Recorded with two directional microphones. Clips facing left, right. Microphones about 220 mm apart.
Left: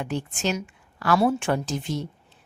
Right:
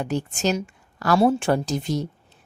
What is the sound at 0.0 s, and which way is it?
A woman's voice, 40° right (ahead or behind).